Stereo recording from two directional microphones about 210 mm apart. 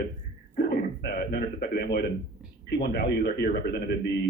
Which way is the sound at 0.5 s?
50° left (ahead or behind).